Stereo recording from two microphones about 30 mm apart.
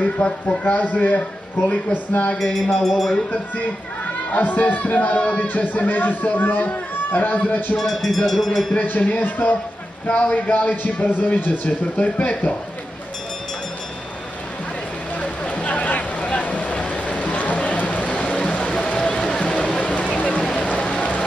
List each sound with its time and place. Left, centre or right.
0.0 s speech: left
0.7 s speech: left
2.9 s speech: centre
4.4 s speech: left
5.4 s a man's voice: left
7.7 s speech: centre
8.7 s a man's voice: left
12.0 s speech: left
15.1 s a sound: left
15.7 s a sound: left